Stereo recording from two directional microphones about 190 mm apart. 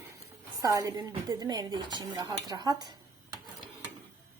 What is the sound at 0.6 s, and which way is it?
Speech, 15° right (ahead or behind).